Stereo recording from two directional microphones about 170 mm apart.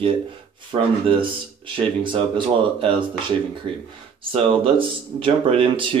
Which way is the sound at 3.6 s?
30° right (ahead or behind).